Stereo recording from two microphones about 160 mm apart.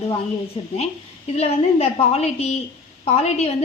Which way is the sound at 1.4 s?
40° left (ahead or behind).